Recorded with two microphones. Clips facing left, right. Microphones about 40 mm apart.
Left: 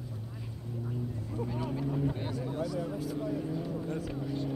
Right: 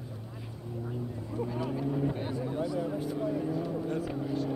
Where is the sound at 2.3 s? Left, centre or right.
Centre.